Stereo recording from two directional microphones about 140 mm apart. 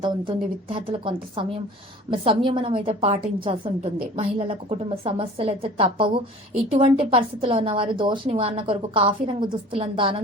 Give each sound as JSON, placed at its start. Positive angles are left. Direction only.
{"t": 0.0, "sound": "a woman's voice", "side_deg": -35}